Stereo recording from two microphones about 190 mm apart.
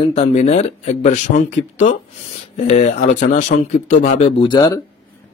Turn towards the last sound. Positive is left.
turn(degrees=20)  # may be behind; listen again after turning